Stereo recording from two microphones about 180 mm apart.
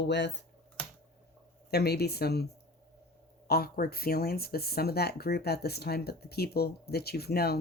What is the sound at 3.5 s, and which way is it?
Speech, 60° left (ahead or behind).